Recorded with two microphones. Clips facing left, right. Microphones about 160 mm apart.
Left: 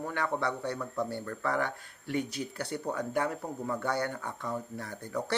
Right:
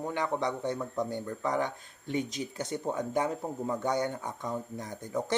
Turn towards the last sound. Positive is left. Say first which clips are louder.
# right 2 dB
turn(degrees=-20)  # may be behind; listen again after turning